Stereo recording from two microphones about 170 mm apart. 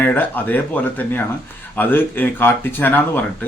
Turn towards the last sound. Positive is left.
turn(degrees=10)  # may be behind; listen again after turning